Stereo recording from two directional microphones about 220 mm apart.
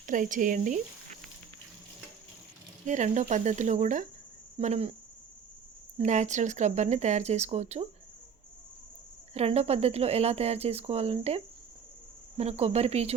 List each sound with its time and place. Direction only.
0.0 s speech: 35° right (ahead or behind)
2.8 s speech: 35° right (ahead or behind)
6.0 s speech: 35° right (ahead or behind)
9.3 s speech: 30° right (ahead or behind)